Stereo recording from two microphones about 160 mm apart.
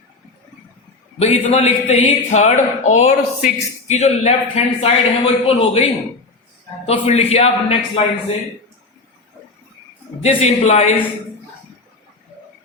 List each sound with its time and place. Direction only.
1.2 s a man's voice: 40° left (ahead or behind)
10.2 s speech: 45° left (ahead or behind)